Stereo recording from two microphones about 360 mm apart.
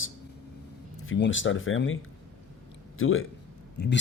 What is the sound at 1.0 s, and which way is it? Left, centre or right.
Speech, left.